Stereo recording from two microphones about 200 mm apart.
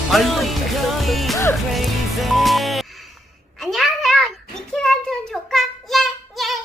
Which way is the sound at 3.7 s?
Centre (ahead or behind).